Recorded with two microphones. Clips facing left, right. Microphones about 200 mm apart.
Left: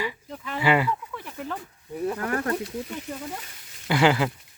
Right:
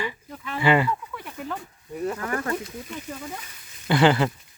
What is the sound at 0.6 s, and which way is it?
Speech, 10° left (ahead or behind).